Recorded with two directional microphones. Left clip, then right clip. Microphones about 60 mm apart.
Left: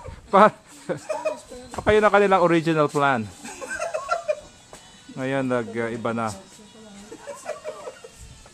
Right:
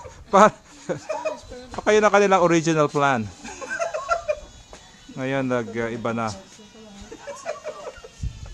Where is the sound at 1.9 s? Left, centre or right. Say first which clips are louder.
Even; centre.